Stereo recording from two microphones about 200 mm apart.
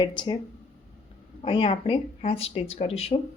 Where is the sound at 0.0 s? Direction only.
20° left (ahead or behind).